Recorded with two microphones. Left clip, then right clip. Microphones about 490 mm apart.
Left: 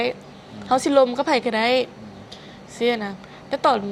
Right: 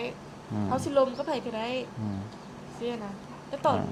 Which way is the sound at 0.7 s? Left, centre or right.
Left.